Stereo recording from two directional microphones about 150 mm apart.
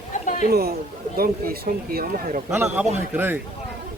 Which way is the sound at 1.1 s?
80° right.